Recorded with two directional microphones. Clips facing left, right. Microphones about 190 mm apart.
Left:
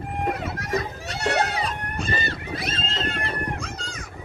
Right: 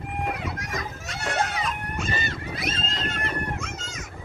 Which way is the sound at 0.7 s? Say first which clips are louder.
Left 6 dB; 35° left (ahead or behind).